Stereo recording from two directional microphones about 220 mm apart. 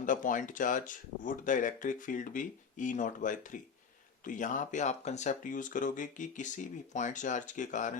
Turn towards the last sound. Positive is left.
turn(degrees=35)  # may be behind; listen again after turning